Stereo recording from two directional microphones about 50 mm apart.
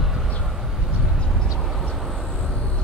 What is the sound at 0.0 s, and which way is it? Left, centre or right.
Vehicle, centre.